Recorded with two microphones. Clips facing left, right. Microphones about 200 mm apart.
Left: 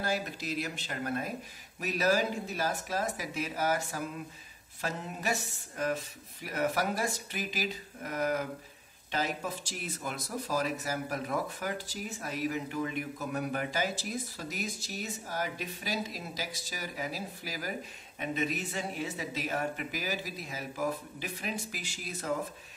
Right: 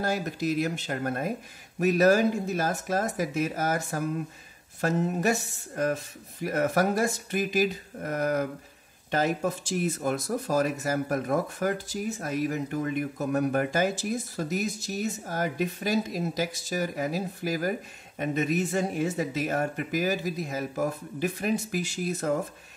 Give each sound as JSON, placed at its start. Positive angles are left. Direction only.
{"t": 0.0, "sound": "speech", "side_deg": -45}